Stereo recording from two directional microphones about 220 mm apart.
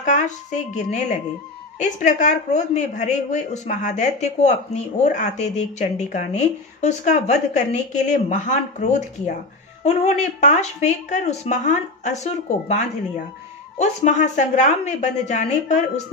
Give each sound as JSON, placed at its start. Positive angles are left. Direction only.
{"t": 0.0, "sound": "a woman's voice", "side_deg": 35}